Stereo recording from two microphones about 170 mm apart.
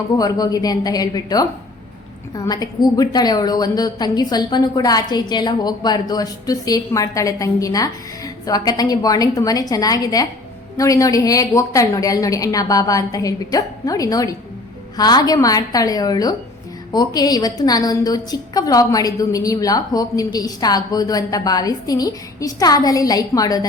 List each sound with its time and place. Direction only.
0.2 s a woman's voice: 20° left (ahead or behind)